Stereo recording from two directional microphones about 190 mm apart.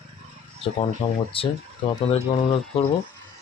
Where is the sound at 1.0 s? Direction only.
25° left (ahead or behind).